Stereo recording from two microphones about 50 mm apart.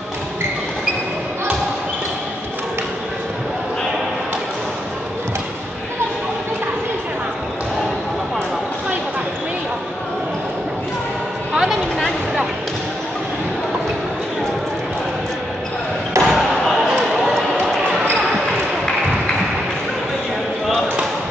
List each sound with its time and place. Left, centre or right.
16.1 s basketball bounce: right